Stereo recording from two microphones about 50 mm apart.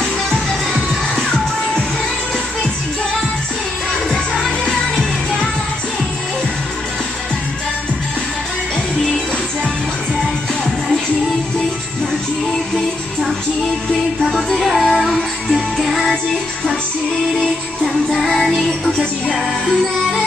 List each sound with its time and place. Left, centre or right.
1.1 s music: centre
4.1 s music: centre
14.6 s music: centre
18.1 s music: centre